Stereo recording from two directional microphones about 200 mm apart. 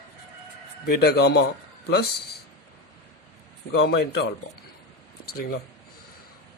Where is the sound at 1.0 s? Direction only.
55° left (ahead or behind).